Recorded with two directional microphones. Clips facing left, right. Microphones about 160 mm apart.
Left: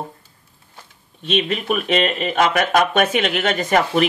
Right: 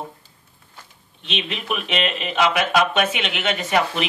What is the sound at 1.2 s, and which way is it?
Speech, 45° left (ahead or behind).